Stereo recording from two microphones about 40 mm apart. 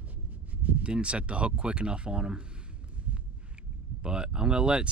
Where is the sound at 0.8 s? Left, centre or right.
Right.